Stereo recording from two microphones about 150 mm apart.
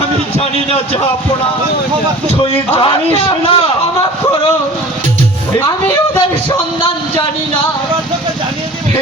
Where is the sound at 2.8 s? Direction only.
35° left (ahead or behind).